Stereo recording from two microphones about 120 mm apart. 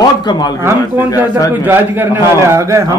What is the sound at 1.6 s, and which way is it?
A man's voice, 15° right (ahead or behind).